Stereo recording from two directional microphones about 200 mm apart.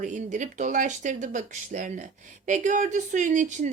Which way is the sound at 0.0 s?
40° right (ahead or behind).